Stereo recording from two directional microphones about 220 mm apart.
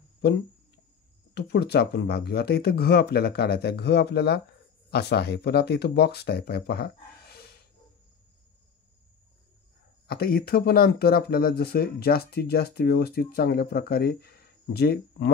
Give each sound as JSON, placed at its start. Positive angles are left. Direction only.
{"t": 1.3, "sound": "speech", "side_deg": 50}
{"t": 10.0, "sound": "speech", "side_deg": 45}